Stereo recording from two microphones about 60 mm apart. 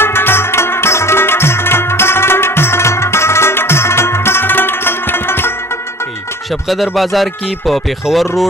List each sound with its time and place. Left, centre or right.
0.0 s music: left
6.7 s speech: centre